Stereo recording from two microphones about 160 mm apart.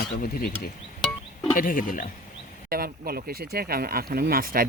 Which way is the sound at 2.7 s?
70° right (ahead or behind).